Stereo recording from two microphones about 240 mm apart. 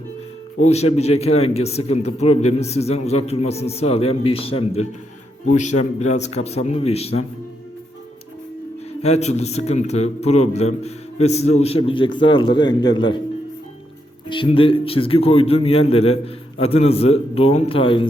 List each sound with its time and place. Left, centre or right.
0.6 s a man's voice: left
9.0 s a man's voice: left
14.3 s a man's voice: left